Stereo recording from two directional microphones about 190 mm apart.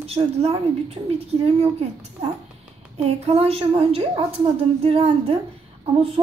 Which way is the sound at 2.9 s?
35° right (ahead or behind).